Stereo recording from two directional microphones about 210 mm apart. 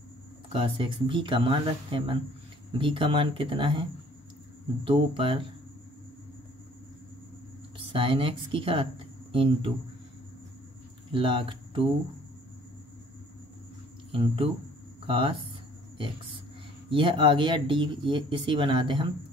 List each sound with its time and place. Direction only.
0.5 s speech: 25° right (ahead or behind)
4.8 s speech: 25° right (ahead or behind)
7.8 s speech: 25° right (ahead or behind)
11.1 s speech: 25° right (ahead or behind)
14.1 s speech: 25° right (ahead or behind)
16.9 s speech: 25° right (ahead or behind)